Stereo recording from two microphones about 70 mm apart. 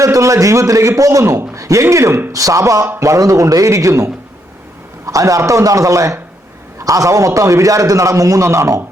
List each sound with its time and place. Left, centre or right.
0.0 s a man's voice: right